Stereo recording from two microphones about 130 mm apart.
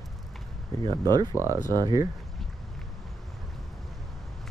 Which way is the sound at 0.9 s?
30° right (ahead or behind).